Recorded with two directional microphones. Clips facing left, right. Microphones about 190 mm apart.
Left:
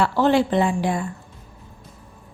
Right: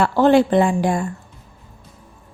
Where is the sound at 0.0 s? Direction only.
50° right (ahead or behind).